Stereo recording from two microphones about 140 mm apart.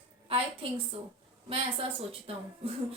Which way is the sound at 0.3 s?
40° right (ahead or behind).